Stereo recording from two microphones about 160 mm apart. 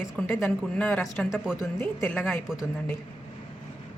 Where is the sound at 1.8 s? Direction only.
15° left (ahead or behind).